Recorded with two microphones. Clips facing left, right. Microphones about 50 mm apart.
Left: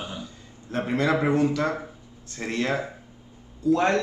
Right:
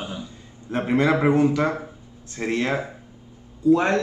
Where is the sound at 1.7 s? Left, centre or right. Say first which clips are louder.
Right 2 dB; centre.